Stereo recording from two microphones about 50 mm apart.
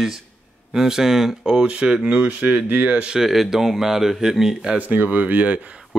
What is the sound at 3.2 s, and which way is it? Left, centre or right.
Speech, centre.